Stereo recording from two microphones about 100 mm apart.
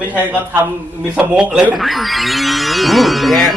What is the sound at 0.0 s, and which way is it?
A man's voice, 15° right (ahead or behind).